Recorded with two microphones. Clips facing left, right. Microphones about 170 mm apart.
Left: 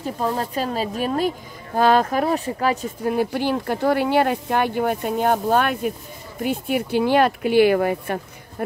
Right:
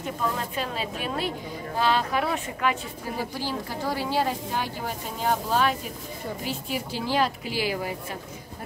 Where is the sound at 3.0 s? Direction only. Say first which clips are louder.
Left 10 dB; 60° left (ahead or behind).